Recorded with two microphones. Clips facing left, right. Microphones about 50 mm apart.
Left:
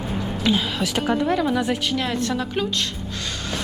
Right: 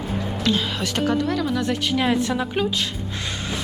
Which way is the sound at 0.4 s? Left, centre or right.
Centre.